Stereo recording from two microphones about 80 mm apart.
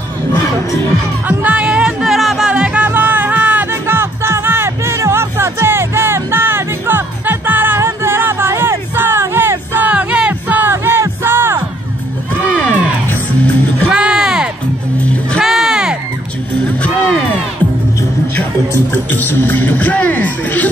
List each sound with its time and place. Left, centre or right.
1.4 s music: centre
3.8 s music: right
9.2 s a sound: right
9.8 s music: centre
10.6 s music: right
13.9 s a sound: centre
16.8 s music: centre
19.1 s speech: left